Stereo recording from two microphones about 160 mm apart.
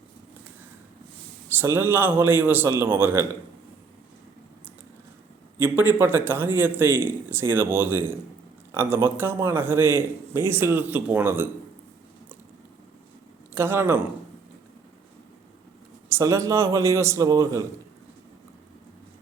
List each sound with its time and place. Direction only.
1.5 s a man's voice: 15° right (ahead or behind)
5.5 s a man's voice: 10° right (ahead or behind)
13.5 s a man's voice: 15° right (ahead or behind)
16.0 s a man's voice: 20° right (ahead or behind)